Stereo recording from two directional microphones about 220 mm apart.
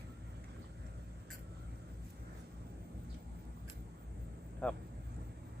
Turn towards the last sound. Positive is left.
turn(degrees=5)  # may be behind; listen again after turning